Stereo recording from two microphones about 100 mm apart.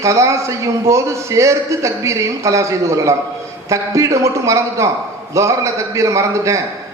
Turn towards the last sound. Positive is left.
turn(degrees=-30)  # may be behind; listen again after turning